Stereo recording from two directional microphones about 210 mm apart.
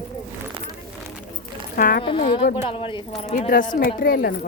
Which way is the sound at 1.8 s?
40° left (ahead or behind).